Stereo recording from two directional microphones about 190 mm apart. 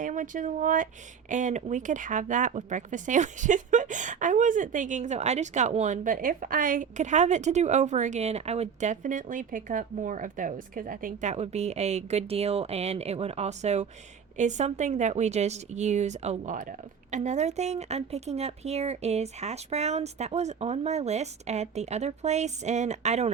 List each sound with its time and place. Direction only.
0.0 s speech: 45° right (ahead or behind)